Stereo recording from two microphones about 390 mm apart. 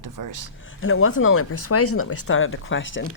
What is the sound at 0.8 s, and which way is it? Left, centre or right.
Speech, left.